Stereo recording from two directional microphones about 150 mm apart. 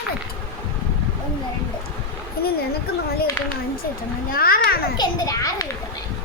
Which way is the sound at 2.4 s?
90° left.